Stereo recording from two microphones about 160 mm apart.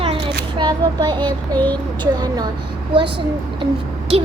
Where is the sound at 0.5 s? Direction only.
25° right (ahead or behind).